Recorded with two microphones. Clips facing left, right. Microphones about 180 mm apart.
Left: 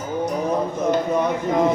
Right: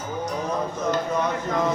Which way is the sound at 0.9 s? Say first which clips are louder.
Left 4 dB; 15° left (ahead or behind).